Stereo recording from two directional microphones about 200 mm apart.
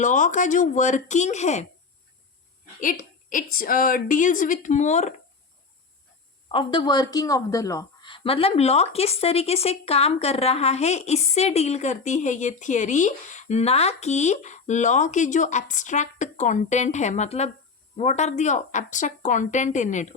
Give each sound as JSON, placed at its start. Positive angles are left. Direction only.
{"t": 0.0, "sound": "a woman's voice", "side_deg": 40}
{"t": 2.8, "sound": "a woman's voice", "side_deg": 40}
{"t": 6.5, "sound": "a woman's voice", "side_deg": 25}